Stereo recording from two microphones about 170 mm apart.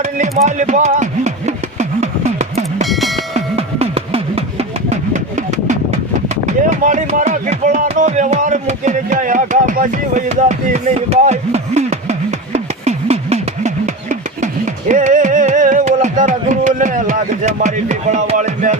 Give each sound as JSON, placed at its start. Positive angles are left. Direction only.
{"t": 0.4, "sound": "music", "side_deg": -45}
{"t": 6.2, "sound": "speech", "side_deg": -45}
{"t": 12.5, "sound": "music", "side_deg": -40}